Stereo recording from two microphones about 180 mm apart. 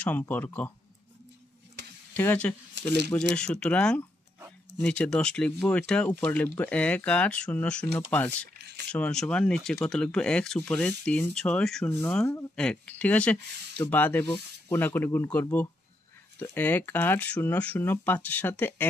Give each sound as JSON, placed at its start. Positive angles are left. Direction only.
{"t": 0.0, "sound": "speech", "side_deg": 10}
{"t": 2.1, "sound": "speech", "side_deg": 10}
{"t": 2.8, "sound": "a sound", "side_deg": -75}
{"t": 3.3, "sound": "speech", "side_deg": 5}